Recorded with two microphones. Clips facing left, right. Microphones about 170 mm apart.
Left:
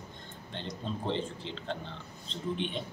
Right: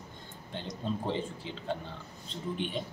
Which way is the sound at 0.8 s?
10° right (ahead or behind).